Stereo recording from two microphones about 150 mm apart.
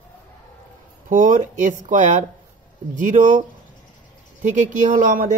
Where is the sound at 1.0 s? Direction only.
60° right (ahead or behind).